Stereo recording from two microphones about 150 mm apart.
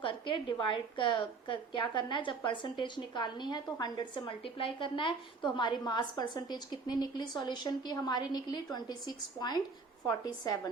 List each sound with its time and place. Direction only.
0.0 s a woman's voice: 35° left (ahead or behind)